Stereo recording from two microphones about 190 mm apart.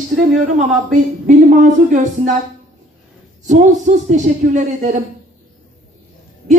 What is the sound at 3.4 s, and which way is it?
Speech, 40° right (ahead or behind).